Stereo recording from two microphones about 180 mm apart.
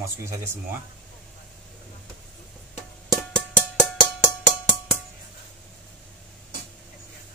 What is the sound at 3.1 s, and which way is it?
Music, 5° left (ahead or behind).